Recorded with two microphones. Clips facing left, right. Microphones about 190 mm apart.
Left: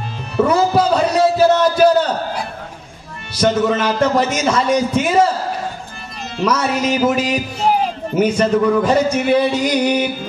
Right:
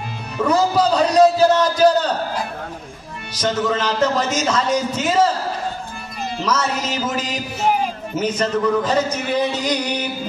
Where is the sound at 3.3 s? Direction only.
10° left (ahead or behind).